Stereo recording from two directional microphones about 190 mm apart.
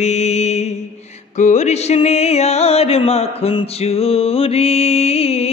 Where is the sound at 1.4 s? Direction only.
40° left (ahead or behind).